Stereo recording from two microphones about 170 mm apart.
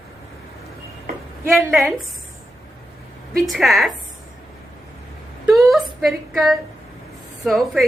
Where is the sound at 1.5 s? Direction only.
Centre (ahead or behind).